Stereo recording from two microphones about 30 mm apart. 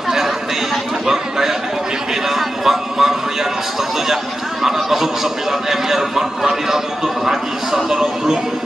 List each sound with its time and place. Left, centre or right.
1.0 s chatter: centre
2.2 s a sound: centre
4.6 s speech: centre